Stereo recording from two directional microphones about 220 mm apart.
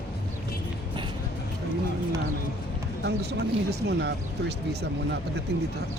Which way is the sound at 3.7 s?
50° right (ahead or behind).